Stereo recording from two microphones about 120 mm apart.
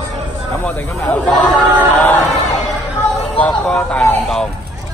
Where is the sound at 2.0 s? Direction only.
15° left (ahead or behind).